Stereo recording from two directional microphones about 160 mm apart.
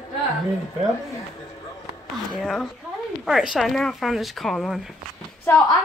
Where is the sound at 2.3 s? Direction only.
Centre (ahead or behind).